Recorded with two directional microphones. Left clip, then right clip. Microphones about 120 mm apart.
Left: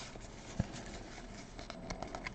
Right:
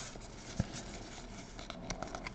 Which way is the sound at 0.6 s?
5° left (ahead or behind).